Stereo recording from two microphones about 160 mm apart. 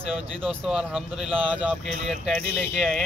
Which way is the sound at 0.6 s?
5° right (ahead or behind).